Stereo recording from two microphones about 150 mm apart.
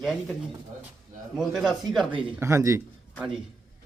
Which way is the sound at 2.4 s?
20° right (ahead or behind).